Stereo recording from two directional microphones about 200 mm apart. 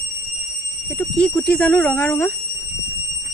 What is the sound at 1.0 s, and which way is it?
Speech, 5° left (ahead or behind).